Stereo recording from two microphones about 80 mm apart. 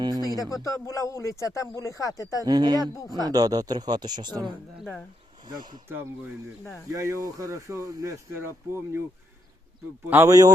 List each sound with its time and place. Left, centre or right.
0.0 s a sound: right
0.5 s speech: left
2.4 s speech: right
6.9 s speech: right
10.2 s speech: right